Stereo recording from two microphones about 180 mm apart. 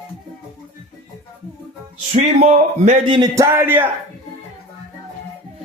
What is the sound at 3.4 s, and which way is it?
Speech, 10° right (ahead or behind).